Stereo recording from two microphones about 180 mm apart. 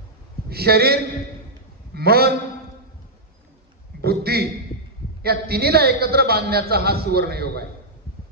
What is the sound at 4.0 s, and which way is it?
A man's voice, 60° right (ahead or behind).